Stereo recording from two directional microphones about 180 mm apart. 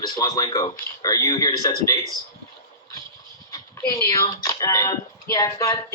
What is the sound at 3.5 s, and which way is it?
Dog, 20° left (ahead or behind).